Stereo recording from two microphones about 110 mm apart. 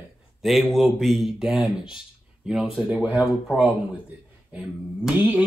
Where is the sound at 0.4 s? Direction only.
Centre (ahead or behind).